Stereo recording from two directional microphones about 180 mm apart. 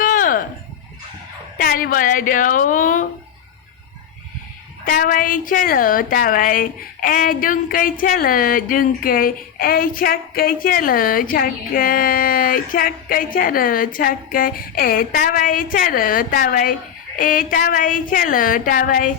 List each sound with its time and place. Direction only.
0.0 s a sound: 50° left (ahead or behind)
1.5 s a woman's voice: 55° left (ahead or behind)
4.9 s a woman's voice: 50° left (ahead or behind)